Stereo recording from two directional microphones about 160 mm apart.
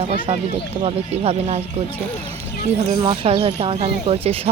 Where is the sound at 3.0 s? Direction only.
30° right (ahead or behind).